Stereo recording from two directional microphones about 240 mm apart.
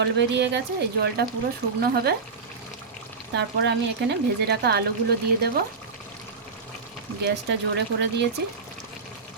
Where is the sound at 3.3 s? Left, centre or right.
Right.